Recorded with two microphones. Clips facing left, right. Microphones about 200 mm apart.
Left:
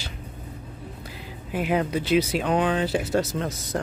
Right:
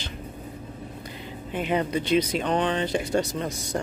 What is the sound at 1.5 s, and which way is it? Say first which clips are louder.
Speech: left 1 dB; 5° left (ahead or behind).